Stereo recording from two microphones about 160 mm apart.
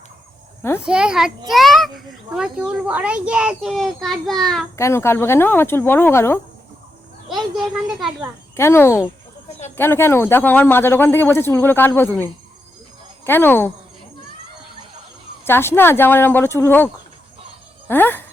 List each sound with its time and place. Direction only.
0.8 s a child's voice: 5° right (ahead or behind)
4.8 s speech: 15° left (ahead or behind)
7.3 s a child's voice: centre (ahead or behind)
8.5 s speech: 15° left (ahead or behind)
15.4 s speech: 15° left (ahead or behind)